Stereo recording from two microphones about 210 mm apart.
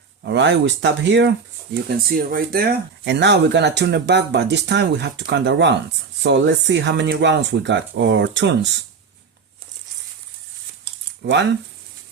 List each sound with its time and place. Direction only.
0.2 s speech: 55° right (ahead or behind)
1.9 s speech: 45° right (ahead or behind)
11.2 s speech: 55° right (ahead or behind)